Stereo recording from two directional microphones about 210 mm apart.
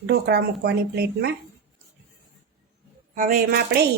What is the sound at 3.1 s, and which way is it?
Speech, 40° right (ahead or behind).